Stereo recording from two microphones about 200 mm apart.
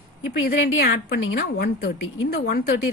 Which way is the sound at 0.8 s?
45° left (ahead or behind).